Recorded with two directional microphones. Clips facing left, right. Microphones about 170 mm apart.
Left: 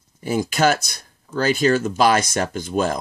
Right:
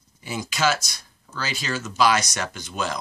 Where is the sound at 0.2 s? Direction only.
50° left (ahead or behind).